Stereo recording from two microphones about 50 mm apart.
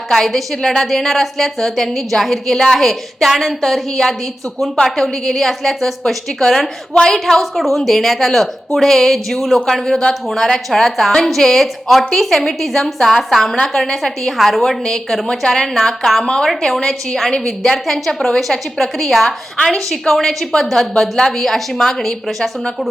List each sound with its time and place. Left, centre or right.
0.1 s a woman's voice: centre